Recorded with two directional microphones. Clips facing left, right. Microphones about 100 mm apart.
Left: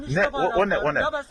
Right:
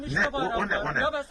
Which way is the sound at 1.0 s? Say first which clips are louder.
Left 3 dB; 25° left (ahead or behind).